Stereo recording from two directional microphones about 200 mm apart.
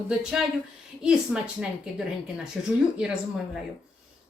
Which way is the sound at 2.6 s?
Centre (ahead or behind).